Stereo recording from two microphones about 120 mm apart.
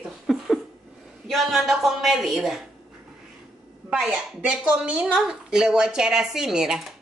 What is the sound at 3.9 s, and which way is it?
A woman's voice, 10° right (ahead or behind).